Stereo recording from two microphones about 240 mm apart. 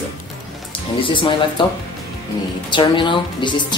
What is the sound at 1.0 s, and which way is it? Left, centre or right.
A woman's voice, left.